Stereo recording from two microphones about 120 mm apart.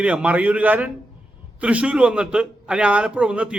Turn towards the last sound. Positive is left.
turn(degrees=-10)  # may be behind; listen again after turning